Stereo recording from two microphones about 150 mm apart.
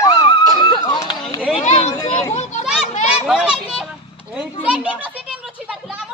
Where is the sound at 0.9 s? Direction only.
25° left (ahead or behind).